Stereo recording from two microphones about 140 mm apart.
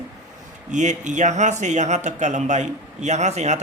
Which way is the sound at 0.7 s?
60° right (ahead or behind).